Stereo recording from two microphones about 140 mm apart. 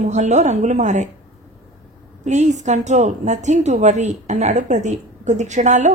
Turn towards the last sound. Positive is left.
turn(degrees=-60)  # may be behind; listen again after turning